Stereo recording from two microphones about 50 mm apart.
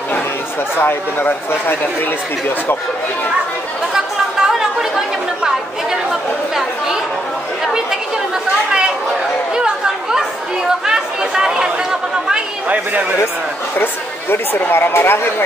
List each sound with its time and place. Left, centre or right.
0.7 s speech: left
3.9 s chatter: centre
10.9 s chatter: centre
12.6 s speech: right
14.3 s speech: left